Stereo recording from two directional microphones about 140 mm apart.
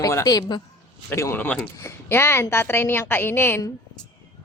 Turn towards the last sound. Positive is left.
turn(degrees=15)  # may be behind; listen again after turning